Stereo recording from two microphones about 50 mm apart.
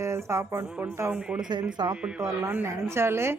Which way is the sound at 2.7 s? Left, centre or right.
Right.